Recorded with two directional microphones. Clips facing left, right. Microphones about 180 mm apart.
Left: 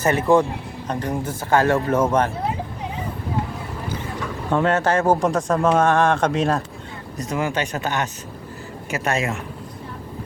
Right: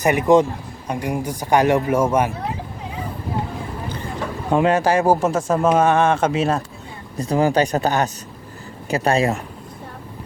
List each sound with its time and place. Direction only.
0.0 s a man's voice: 15° right (ahead or behind)
4.5 s speech: 15° right (ahead or behind)
7.2 s speech: 35° right (ahead or behind)